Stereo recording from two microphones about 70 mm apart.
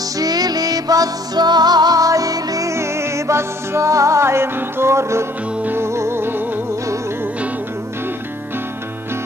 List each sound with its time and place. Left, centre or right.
0.2 s music: right